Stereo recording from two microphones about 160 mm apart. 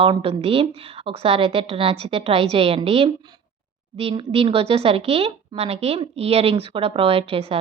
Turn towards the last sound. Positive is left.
turn(degrees=-35)  # may be behind; listen again after turning